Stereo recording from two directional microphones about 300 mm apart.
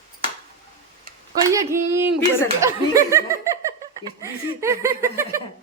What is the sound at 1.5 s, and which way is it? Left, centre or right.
Speech, centre.